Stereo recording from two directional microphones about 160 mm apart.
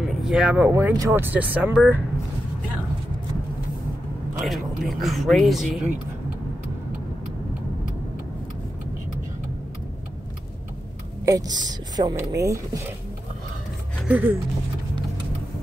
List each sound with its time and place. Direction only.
0.2 s speech: 5° right (ahead or behind)
4.4 s speech: centre (ahead or behind)
11.2 s a woman's voice: 25° right (ahead or behind)
14.0 s speech: 10° right (ahead or behind)